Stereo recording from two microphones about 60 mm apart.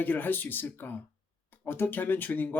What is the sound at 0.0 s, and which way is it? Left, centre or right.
Speech, left.